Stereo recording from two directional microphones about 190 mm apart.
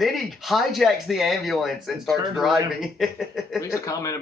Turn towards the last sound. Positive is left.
turn(degrees=15)  # may be behind; listen again after turning